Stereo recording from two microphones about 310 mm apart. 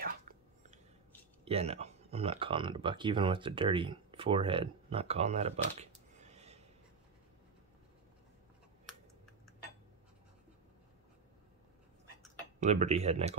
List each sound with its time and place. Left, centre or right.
1.4 s speech: centre
12.5 s speech: right